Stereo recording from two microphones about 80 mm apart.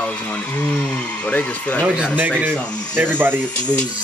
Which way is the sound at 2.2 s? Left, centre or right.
Centre.